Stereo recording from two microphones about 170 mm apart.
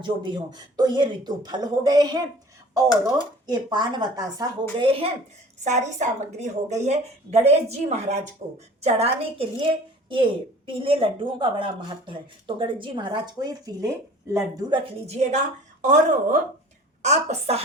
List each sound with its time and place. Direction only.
0.0 s speech: 25° right (ahead or behind)
3.4 s speech: 25° right (ahead or behind)
5.6 s a woman's voice: 45° right (ahead or behind); by 14.8 s 20° right (ahead or behind)
15.0 s a woman's voice: 40° right (ahead or behind)